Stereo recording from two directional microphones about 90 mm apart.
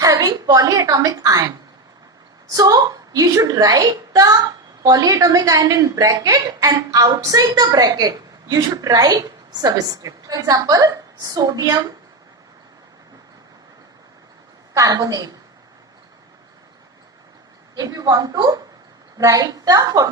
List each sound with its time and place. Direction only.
0.0 s a woman's voice: 40° right (ahead or behind)
14.7 s a woman's voice: 40° right (ahead or behind)
17.7 s a woman's voice: 40° right (ahead or behind)